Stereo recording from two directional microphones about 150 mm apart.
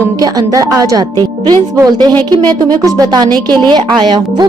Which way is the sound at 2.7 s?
25° right (ahead or behind).